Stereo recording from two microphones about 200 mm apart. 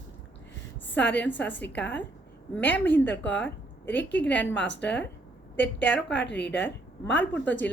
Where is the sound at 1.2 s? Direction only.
10° left (ahead or behind).